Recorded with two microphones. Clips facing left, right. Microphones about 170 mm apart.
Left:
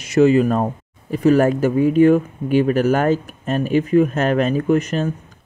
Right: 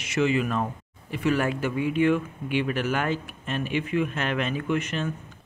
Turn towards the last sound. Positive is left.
turn(degrees=40)  # may be behind; listen again after turning